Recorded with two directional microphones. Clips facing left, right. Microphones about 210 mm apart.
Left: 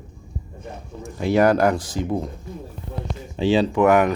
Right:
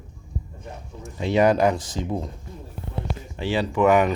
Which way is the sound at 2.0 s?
15° left (ahead or behind).